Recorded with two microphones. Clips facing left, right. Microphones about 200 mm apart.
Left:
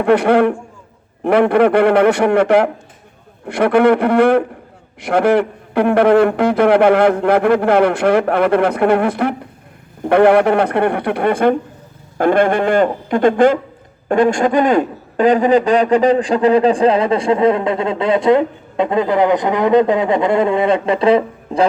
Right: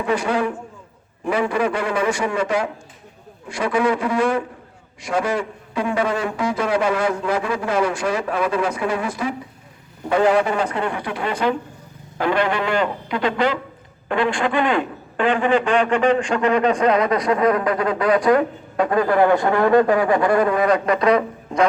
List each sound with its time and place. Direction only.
0.0 s a man's voice: 60° left (ahead or behind); by 21.7 s 30° left (ahead or behind)